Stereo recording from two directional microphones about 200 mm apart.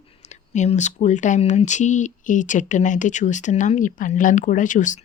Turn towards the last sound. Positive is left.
turn(degrees=40)  # may be behind; listen again after turning